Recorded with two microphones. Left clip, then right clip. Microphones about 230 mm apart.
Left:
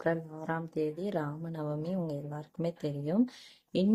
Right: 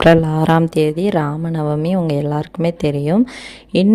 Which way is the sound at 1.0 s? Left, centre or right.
Right.